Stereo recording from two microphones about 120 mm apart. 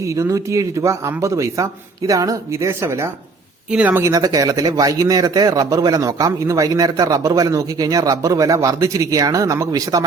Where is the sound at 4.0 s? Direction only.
30° right (ahead or behind).